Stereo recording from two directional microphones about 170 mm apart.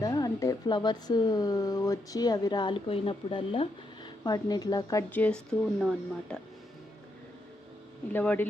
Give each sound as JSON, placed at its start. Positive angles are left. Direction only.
{"t": 0.0, "sound": "speech", "side_deg": 20}
{"t": 5.2, "sound": "speech", "side_deg": 5}
{"t": 8.1, "sound": "a man's voice", "side_deg": 10}